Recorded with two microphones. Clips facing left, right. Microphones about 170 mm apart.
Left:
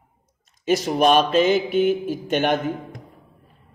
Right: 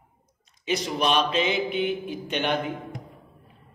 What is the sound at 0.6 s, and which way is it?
A man's voice, 45° left (ahead or behind).